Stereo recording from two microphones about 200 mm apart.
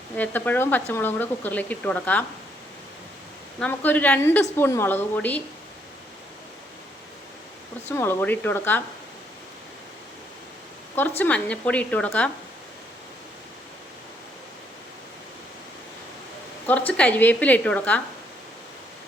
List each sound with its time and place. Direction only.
0.2 s a woman's voice: 10° left (ahead or behind)
3.6 s a woman's voice: 10° left (ahead or behind)
7.9 s a woman's voice: 10° left (ahead or behind)
11.2 s a woman's voice: 5° left (ahead or behind)
16.6 s a woman's voice: 5° left (ahead or behind)